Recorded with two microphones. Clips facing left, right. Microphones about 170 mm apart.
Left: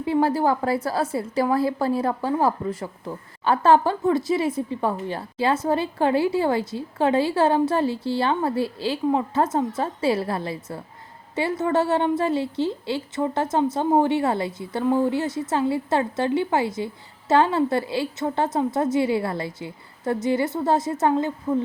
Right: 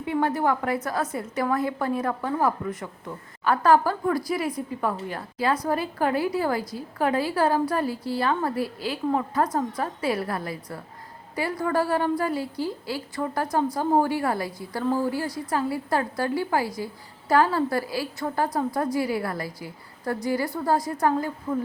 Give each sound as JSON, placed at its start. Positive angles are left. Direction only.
{"t": 0.0, "sound": "a woman's voice", "side_deg": 30}